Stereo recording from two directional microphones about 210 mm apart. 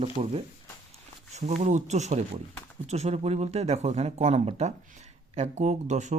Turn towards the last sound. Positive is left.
turn(degrees=-35)  # may be behind; listen again after turning